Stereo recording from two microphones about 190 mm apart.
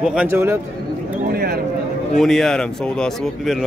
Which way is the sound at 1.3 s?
55° right (ahead or behind).